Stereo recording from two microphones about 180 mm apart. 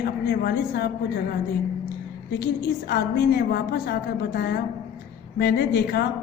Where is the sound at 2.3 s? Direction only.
60° left (ahead or behind).